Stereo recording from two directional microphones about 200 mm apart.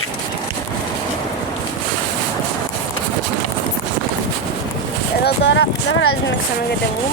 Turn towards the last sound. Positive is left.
turn(degrees=60)  # may be behind; listen again after turning